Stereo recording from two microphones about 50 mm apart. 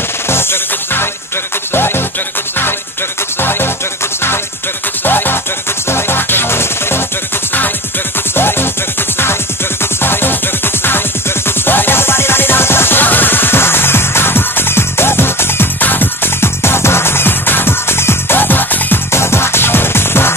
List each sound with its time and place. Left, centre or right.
0.3 s music: left
3.3 s music: left
5.0 s music: left
8.4 s music: left
10.0 s music: left
15.8 s music: left
16.6 s music: left
19.1 s music: left